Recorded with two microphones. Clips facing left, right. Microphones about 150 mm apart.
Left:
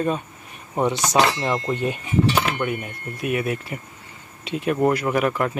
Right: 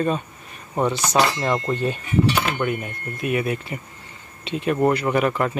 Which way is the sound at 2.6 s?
5° left (ahead or behind).